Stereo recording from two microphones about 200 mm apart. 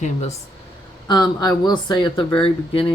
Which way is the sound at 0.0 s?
35° left (ahead or behind).